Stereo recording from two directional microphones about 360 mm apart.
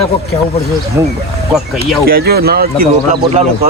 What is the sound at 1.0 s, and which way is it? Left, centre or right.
Speech, centre.